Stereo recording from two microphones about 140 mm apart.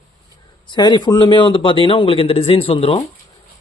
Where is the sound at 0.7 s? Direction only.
30° left (ahead or behind).